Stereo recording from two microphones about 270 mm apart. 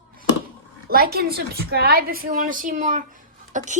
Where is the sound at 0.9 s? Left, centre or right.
Right.